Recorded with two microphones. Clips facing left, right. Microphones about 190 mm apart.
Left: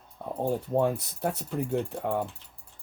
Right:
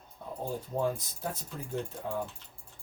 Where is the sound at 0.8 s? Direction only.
65° left (ahead or behind).